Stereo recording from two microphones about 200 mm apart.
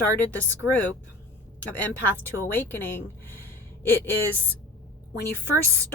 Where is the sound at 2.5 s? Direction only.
10° left (ahead or behind).